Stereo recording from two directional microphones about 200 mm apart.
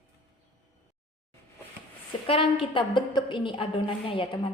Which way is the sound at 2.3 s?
25° left (ahead or behind).